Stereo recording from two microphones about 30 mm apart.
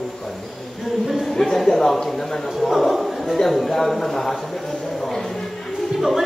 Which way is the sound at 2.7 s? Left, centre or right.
Centre.